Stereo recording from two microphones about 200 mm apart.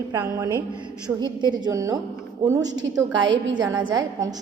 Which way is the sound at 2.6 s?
65° right (ahead or behind).